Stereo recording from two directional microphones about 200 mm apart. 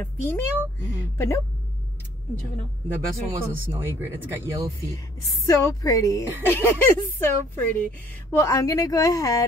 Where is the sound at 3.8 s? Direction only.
10° right (ahead or behind).